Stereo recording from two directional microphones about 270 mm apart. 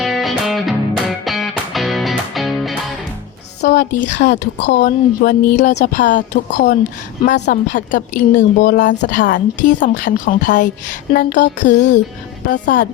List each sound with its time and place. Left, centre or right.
0.0 s music: centre
3.8 s speech: left